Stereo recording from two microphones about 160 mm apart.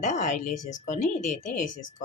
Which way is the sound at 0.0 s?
50° left (ahead or behind).